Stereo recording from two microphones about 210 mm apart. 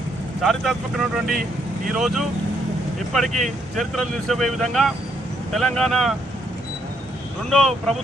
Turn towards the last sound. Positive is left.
turn(degrees=0)  # may be behind; listen again after turning